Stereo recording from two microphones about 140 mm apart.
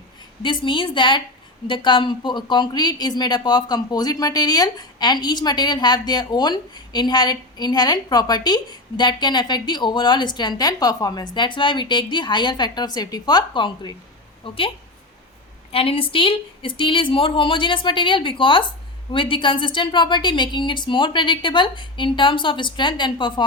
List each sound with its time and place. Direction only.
0.4 s speech: 35° left (ahead or behind)
15.7 s speech: 40° left (ahead or behind)